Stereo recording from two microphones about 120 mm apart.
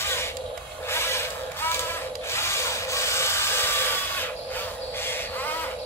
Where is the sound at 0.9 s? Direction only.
20° left (ahead or behind).